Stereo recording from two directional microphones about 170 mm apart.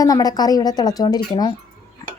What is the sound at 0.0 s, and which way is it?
A woman's voice, 20° left (ahead or behind).